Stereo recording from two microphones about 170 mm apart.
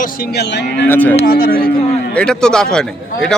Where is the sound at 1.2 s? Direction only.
60° left (ahead or behind).